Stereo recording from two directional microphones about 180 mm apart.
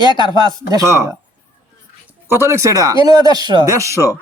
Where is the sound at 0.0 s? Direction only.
25° left (ahead or behind).